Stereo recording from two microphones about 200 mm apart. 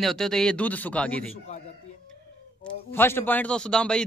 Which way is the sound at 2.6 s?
10° left (ahead or behind).